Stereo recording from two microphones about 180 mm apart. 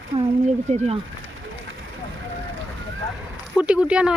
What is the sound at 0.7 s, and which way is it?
Speech, 40° right (ahead or behind).